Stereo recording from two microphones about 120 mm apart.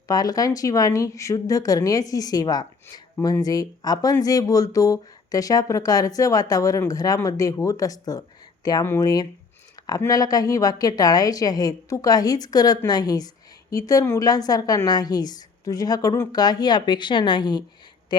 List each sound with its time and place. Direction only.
0.1 s a woman's voice: 30° left (ahead or behind)